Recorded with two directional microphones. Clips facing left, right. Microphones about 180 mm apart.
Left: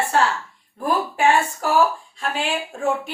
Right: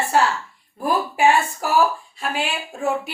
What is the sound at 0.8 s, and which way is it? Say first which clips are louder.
A woman's voice: right 1 dB; 10° right (ahead or behind).